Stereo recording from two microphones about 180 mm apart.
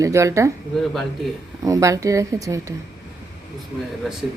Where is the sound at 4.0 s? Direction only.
Centre (ahead or behind).